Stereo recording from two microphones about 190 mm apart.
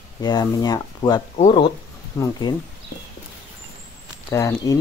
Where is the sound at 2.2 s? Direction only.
20° left (ahead or behind).